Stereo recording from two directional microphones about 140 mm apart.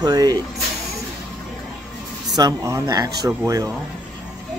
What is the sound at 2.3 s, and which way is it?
Speech, 25° right (ahead or behind).